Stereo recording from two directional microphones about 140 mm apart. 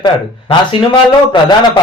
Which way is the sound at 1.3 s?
35° left (ahead or behind).